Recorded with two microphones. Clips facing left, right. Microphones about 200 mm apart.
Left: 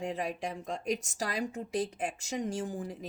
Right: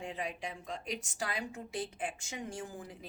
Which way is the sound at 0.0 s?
45° left (ahead or behind).